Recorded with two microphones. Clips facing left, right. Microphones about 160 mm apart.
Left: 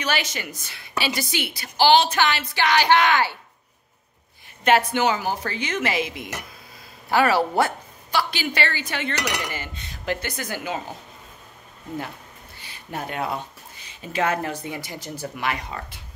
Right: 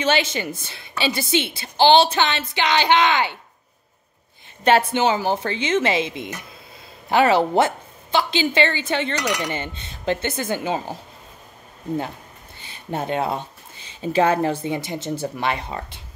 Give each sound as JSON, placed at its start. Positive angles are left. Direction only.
{"t": 0.0, "sound": "a woman's voice", "side_deg": -25}
{"t": 4.6, "sound": "a woman's voice", "side_deg": -30}
{"t": 12.5, "sound": "speech", "side_deg": -25}